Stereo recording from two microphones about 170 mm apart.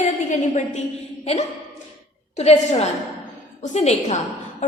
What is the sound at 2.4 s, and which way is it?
A woman's voice, 40° left (ahead or behind).